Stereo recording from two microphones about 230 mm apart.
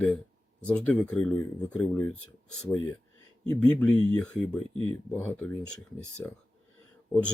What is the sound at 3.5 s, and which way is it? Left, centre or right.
Speech, centre.